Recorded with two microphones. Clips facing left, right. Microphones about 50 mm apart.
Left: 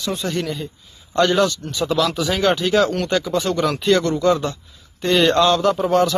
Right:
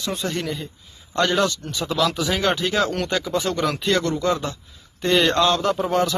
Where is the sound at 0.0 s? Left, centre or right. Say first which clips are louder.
Left 2 dB; right.